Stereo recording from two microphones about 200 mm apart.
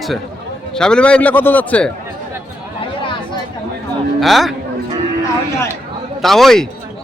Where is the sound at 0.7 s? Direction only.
5° left (ahead or behind).